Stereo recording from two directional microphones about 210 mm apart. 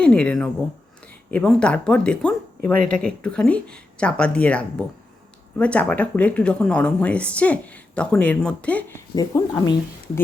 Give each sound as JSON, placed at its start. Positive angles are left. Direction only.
{"t": 0.0, "sound": "speech", "side_deg": 5}
{"t": 9.1, "sound": "speech", "side_deg": 15}